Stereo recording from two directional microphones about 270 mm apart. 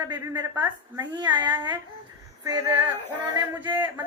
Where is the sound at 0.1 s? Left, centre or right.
Centre.